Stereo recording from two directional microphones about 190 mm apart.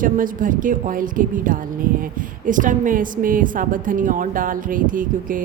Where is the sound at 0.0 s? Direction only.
45° right (ahead or behind).